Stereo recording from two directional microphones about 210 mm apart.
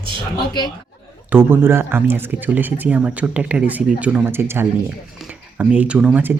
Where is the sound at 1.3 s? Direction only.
10° right (ahead or behind).